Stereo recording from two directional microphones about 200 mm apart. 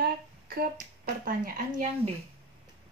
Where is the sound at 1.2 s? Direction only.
45° right (ahead or behind).